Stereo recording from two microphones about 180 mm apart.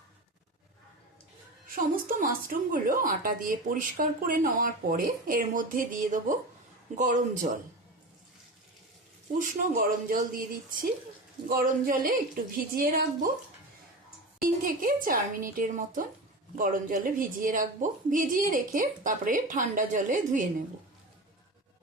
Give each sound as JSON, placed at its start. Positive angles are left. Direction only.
{"t": 1.7, "sound": "a woman's voice", "side_deg": -50}
{"t": 9.4, "sound": "a woman's voice", "side_deg": -50}
{"t": 14.4, "sound": "a woman's voice", "side_deg": -50}